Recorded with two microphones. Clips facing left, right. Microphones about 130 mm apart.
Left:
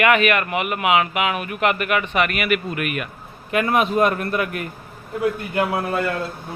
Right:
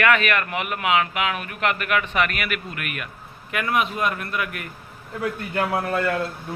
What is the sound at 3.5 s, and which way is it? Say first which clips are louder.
A man's voice: left 5 dB; 30° left (ahead or behind).